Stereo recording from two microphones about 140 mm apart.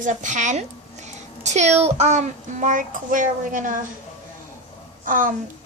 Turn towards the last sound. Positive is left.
turn(degrees=-75)  # may be behind; listen again after turning